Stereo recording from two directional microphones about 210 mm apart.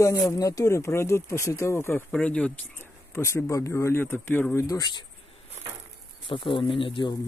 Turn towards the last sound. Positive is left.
turn(degrees=25)  # may be behind; listen again after turning